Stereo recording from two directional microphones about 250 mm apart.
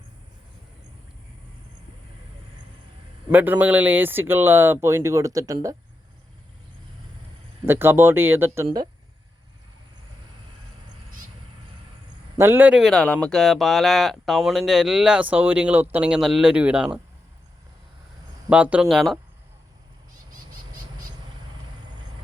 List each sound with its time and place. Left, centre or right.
3.2 s speech: centre
7.6 s speech: centre
12.4 s speech: centre
18.4 s speech: centre